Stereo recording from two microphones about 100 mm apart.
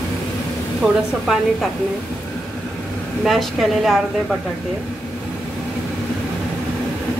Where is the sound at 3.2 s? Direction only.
Centre (ahead or behind).